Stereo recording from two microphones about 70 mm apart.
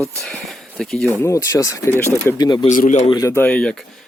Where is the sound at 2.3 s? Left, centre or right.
Left.